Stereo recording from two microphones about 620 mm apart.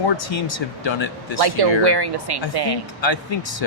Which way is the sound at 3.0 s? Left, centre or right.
Left.